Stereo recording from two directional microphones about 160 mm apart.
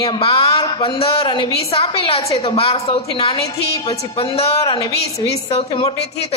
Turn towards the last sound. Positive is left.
turn(degrees=40)  # may be behind; listen again after turning